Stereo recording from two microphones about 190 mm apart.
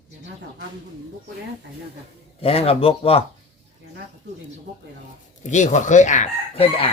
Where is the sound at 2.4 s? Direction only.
30° left (ahead or behind).